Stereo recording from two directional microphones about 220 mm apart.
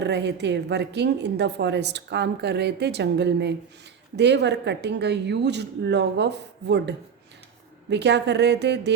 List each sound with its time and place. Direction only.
0.0 s a woman's voice: 50° right (ahead or behind)